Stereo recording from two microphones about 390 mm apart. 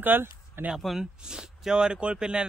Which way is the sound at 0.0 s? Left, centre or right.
Centre.